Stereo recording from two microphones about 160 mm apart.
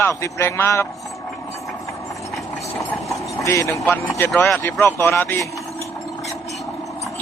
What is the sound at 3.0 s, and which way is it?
A man's voice, 20° left (ahead or behind).